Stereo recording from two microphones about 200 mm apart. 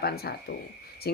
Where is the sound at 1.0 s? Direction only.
50° left (ahead or behind).